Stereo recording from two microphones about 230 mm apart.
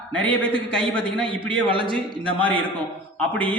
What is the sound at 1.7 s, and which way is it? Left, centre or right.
Speech, right.